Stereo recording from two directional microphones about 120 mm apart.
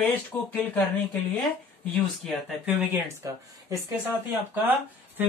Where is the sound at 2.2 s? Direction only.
5° left (ahead or behind).